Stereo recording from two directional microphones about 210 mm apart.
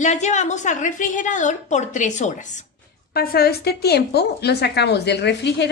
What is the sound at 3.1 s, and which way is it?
A woman's voice, 45° left (ahead or behind).